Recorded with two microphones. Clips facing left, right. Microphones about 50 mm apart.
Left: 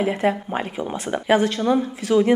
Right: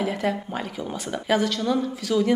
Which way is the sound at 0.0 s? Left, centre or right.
Left.